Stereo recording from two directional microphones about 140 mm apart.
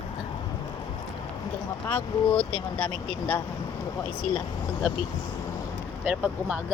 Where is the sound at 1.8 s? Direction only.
10° left (ahead or behind).